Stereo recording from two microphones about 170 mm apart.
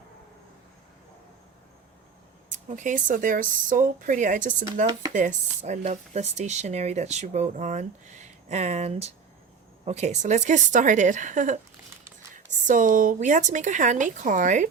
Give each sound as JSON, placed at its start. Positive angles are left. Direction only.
{"t": 2.5, "sound": "speech", "side_deg": -45}